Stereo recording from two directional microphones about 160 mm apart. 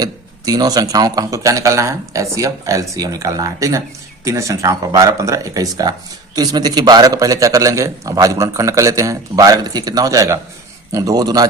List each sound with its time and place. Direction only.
0.0 s speech: 25° right (ahead or behind)